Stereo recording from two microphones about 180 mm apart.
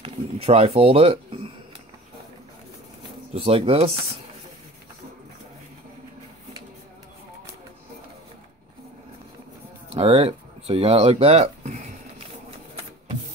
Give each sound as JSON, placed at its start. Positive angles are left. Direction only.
{"t": 0.0, "sound": "speech", "side_deg": -35}
{"t": 3.3, "sound": "speech", "side_deg": -30}
{"t": 9.9, "sound": "a sound", "side_deg": -35}